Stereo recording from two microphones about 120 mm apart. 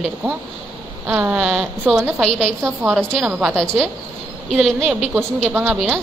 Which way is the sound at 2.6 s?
20° right (ahead or behind).